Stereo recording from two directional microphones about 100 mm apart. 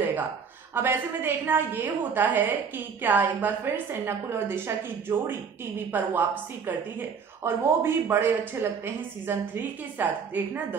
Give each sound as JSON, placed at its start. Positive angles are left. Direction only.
{"t": 0.7, "sound": "speech", "side_deg": -20}